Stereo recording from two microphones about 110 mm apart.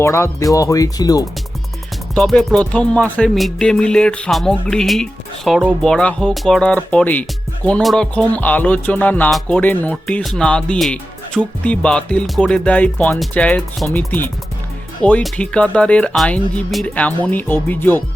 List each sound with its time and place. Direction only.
0.0 s speech: 25° left (ahead or behind)
2.1 s speech: 5° left (ahead or behind)
7.8 s speech: centre (ahead or behind)
8.1 s speech: 10° left (ahead or behind)
15.0 s speech: 10° left (ahead or behind)